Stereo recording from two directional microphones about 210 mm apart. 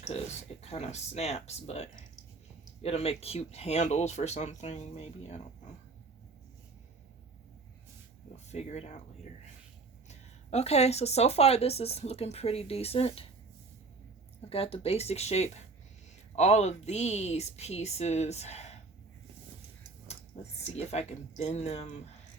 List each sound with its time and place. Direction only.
0.1 s speech: 30° left (ahead or behind)
8.4 s speech: 30° left (ahead or behind)
10.1 s speech: 30° left (ahead or behind)
14.5 s speech: 25° left (ahead or behind)
20.6 s speech: 30° left (ahead or behind)